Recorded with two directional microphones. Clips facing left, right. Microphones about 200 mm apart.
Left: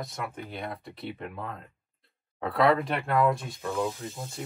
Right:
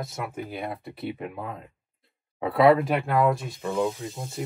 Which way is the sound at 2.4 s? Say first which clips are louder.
Right 5 dB; 5° right (ahead or behind).